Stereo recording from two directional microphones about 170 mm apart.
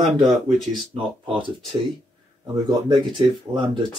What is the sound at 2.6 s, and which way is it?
Speech, 25° right (ahead or behind).